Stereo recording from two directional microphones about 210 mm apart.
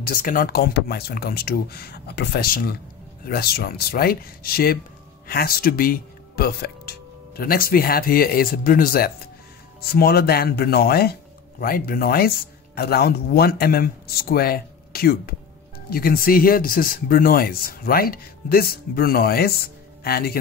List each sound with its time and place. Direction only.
0.0 s speech: 40° left (ahead or behind)